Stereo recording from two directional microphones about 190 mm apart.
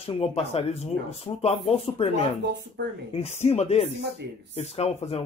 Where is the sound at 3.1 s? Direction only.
35° left (ahead or behind).